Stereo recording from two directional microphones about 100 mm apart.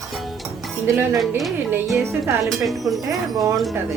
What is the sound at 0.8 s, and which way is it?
Speech, 25° right (ahead or behind).